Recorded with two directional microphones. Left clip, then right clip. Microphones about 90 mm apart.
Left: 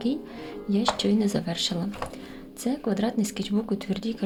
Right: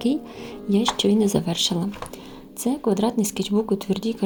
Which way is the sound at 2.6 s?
40° right (ahead or behind).